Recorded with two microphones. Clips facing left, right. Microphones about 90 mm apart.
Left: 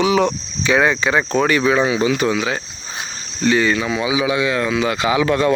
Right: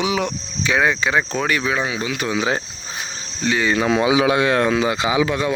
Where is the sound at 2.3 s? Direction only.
25° right (ahead or behind).